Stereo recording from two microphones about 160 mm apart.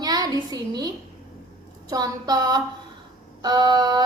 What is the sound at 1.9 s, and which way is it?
A woman's voice, 25° right (ahead or behind).